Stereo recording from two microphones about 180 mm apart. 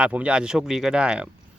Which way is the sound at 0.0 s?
5° right (ahead or behind).